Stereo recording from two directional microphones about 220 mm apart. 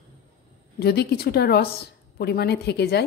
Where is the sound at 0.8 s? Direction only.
45° left (ahead or behind).